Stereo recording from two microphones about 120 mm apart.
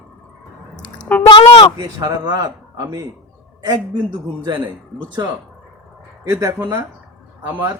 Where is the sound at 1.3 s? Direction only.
50° left (ahead or behind).